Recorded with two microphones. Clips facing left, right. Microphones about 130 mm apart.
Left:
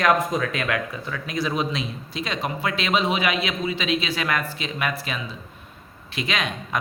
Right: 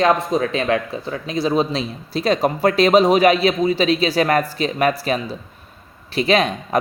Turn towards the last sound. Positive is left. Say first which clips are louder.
# right 10 dB
turn(degrees=-35)  # may be behind; listen again after turning